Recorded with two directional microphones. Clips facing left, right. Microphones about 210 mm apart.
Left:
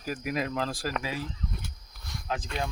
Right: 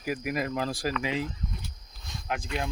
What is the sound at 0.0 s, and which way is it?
Speech, 10° right (ahead or behind).